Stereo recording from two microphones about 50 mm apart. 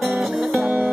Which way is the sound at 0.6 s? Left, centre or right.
Right.